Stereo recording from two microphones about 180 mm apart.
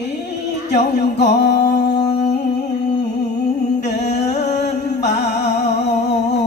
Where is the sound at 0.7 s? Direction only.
70° left (ahead or behind).